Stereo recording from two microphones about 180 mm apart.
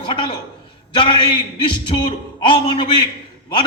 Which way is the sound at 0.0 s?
25° left (ahead or behind).